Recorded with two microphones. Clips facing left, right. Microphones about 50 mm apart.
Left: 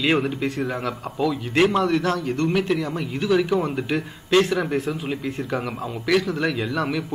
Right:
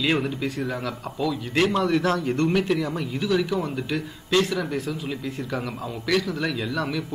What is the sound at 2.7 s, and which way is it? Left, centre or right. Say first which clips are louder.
Speech: left 1 dB; centre.